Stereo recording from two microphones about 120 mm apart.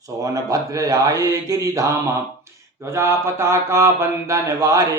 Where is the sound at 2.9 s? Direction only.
20° right (ahead or behind).